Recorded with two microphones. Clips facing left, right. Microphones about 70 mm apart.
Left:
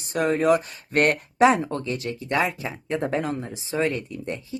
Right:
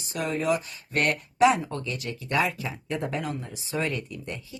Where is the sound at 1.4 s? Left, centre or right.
Left.